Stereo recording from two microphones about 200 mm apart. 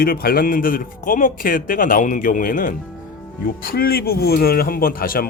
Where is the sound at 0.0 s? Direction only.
50° left (ahead or behind).